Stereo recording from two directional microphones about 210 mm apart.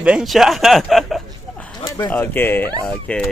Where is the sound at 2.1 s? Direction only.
10° left (ahead or behind).